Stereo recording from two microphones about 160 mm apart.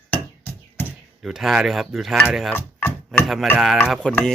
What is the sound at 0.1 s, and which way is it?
Chop, 15° left (ahead or behind).